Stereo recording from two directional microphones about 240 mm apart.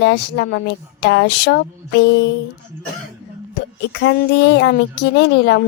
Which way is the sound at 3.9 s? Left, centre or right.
Left.